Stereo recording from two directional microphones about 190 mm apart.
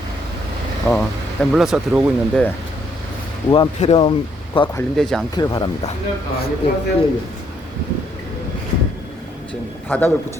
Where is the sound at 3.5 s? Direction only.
30° left (ahead or behind).